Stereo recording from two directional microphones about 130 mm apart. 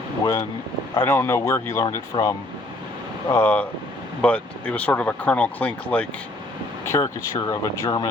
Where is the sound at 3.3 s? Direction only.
15° left (ahead or behind).